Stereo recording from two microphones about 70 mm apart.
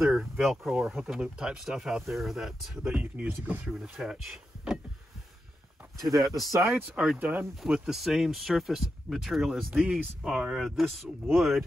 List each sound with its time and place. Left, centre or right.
0.1 s speech: centre
3.0 s speech: right
3.7 s speech: centre
5.9 s speech: centre
7.2 s speech: right
7.6 s speech: centre
9.7 s speech: centre
10.2 s speech: centre